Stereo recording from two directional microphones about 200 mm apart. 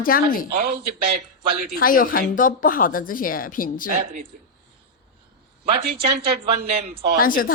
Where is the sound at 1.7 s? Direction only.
45° left (ahead or behind).